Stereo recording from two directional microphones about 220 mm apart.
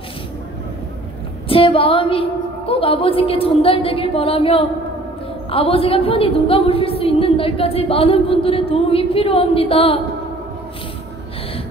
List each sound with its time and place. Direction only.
1.5 s a woman's voice: 25° left (ahead or behind)